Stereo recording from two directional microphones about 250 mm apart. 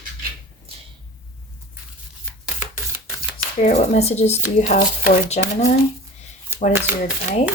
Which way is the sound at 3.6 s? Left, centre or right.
Left.